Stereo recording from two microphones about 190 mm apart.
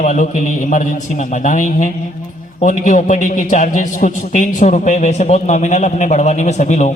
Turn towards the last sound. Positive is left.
turn(degrees=35)  # may be behind; listen again after turning